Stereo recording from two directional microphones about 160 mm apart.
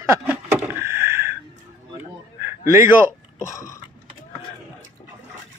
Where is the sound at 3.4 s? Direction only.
20° left (ahead or behind).